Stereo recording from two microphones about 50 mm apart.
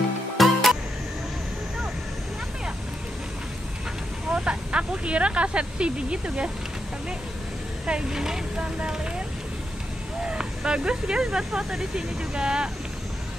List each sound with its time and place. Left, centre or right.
0.4 s music: centre
4.3 s speech: centre
7.8 s speech: centre
10.2 s speech: centre